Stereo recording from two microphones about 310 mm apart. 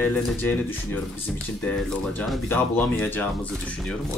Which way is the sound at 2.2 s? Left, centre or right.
Centre.